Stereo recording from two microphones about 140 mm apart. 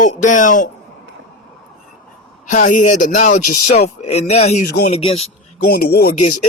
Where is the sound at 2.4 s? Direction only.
65° left (ahead or behind); by 5.3 s 45° left (ahead or behind).